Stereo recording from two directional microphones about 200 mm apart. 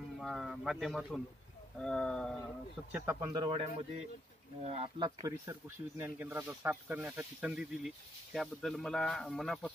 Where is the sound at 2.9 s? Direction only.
10° right (ahead or behind); by 5.1 s 30° right (ahead or behind).